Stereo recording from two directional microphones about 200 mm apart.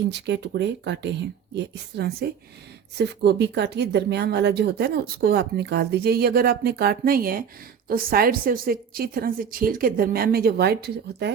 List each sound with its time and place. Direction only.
0.1 s a woman's voice: 55° right (ahead or behind)